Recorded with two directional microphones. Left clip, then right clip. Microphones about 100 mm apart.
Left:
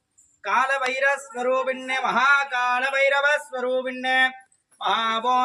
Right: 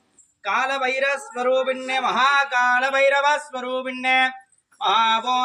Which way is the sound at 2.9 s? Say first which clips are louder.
Right 2 dB; 25° left (ahead or behind).